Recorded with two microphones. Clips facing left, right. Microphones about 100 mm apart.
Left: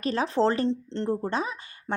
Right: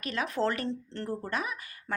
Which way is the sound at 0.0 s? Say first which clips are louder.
Left 6 dB; 30° left (ahead or behind).